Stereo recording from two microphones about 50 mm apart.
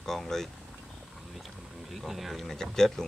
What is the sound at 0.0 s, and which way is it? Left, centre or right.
Vehicle, centre.